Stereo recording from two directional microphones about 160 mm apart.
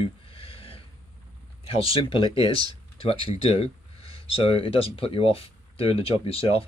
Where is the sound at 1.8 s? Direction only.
35° left (ahead or behind).